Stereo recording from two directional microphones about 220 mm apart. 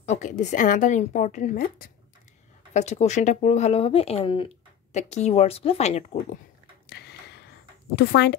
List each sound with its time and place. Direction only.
0.0 s a woman's voice: 30° left (ahead or behind)
6.9 s a sound: 50° left (ahead or behind)
7.9 s speech: 45° left (ahead or behind)